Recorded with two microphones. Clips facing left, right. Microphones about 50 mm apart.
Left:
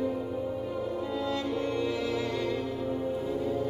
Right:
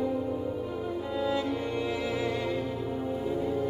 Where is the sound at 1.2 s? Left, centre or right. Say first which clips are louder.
Right 3 dB; centre.